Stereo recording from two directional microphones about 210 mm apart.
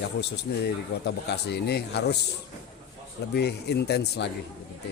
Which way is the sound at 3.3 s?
50° left (ahead or behind).